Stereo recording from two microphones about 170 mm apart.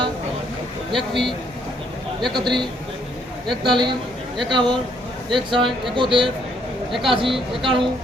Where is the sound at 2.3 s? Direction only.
25° right (ahead or behind).